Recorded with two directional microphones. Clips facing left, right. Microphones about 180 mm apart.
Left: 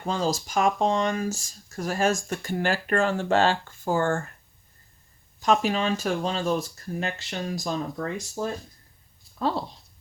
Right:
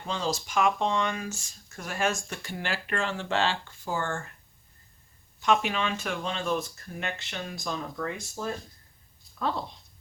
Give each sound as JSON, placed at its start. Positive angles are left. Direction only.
{"t": 0.0, "sound": "speech", "side_deg": 45}
{"t": 5.4, "sound": "speech", "side_deg": 40}